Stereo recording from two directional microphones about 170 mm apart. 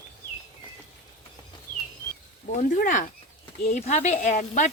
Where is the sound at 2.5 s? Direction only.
50° left (ahead or behind).